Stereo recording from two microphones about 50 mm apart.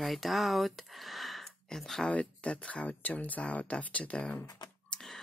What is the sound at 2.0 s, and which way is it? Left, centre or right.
Speech, left.